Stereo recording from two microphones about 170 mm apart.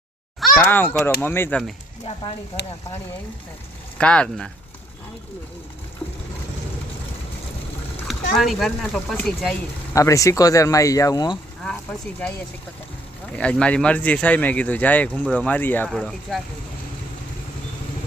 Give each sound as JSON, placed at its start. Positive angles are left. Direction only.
{"t": 0.6, "sound": "speech", "side_deg": 15}
{"t": 3.9, "sound": "speech", "side_deg": 5}
{"t": 8.4, "sound": "speech", "side_deg": 0}
{"t": 9.9, "sound": "speech", "side_deg": 20}
{"t": 11.6, "sound": "speech", "side_deg": 5}
{"t": 13.3, "sound": "speech", "side_deg": 5}